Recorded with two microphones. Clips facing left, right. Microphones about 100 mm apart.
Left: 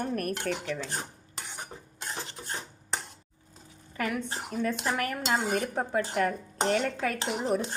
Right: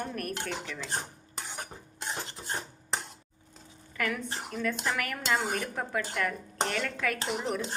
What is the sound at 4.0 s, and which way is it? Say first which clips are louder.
Speech: even; 30° left (ahead or behind).